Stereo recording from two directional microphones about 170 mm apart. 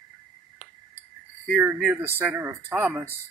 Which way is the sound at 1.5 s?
10° right (ahead or behind).